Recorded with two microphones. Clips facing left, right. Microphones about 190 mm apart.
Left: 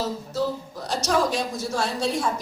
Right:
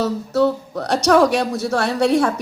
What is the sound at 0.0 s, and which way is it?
Speech, 65° right (ahead or behind).